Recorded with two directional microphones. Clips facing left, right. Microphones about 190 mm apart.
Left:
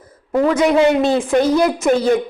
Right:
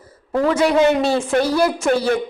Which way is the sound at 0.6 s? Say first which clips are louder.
Left 1 dB; 15° left (ahead or behind).